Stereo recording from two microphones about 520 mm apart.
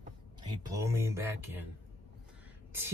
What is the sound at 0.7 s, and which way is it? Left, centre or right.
Speech, centre.